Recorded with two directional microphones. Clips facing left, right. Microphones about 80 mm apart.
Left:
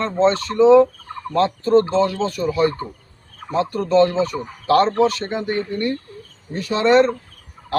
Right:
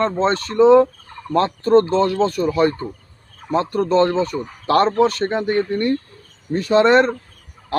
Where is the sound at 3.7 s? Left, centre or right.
Right.